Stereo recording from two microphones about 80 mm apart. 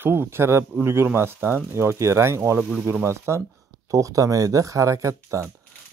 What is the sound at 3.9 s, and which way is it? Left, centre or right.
Speech, right.